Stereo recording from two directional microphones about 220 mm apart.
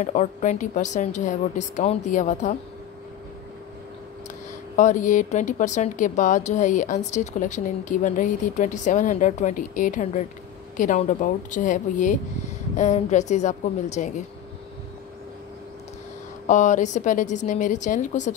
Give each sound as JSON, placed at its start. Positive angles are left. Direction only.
{"t": 0.0, "sound": "speech", "side_deg": 35}
{"t": 4.7, "sound": "speech", "side_deg": 35}
{"t": 16.4, "sound": "speech", "side_deg": 35}